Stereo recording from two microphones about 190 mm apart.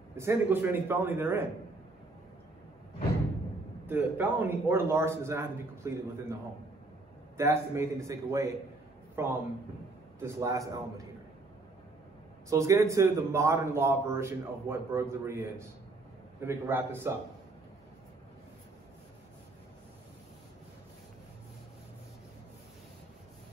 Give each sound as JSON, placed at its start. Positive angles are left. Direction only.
{"t": 0.1, "sound": "a man's voice", "side_deg": -15}
{"t": 3.8, "sound": "a man's voice", "side_deg": -10}
{"t": 7.3, "sound": "a man's voice", "side_deg": -15}
{"t": 12.4, "sound": "a man's voice", "side_deg": -15}